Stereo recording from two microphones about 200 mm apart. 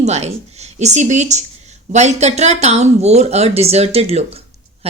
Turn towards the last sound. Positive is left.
turn(degrees=-30)  # may be behind; listen again after turning